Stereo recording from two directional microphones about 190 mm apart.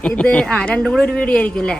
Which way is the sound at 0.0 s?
5° left (ahead or behind).